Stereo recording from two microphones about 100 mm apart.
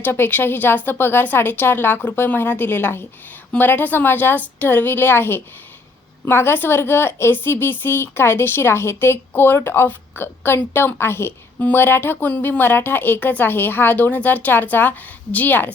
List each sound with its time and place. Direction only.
0.0 s a woman's voice: 20° left (ahead or behind)